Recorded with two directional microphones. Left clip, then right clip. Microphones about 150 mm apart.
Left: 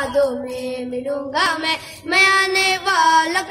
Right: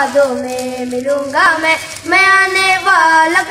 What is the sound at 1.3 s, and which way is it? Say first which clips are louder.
Child singing: right 8 dB; 50° left (ahead or behind).